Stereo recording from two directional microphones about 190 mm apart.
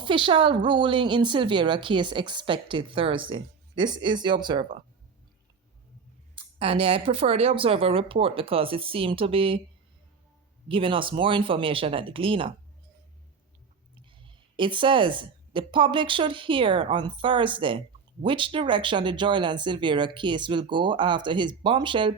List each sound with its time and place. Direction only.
0.0 s a woman's voice: 25° right (ahead or behind)
6.3 s a woman's voice: 30° right (ahead or behind)
10.7 s a woman's voice: 25° right (ahead or behind)
13.9 s a woman's voice: 25° right (ahead or behind)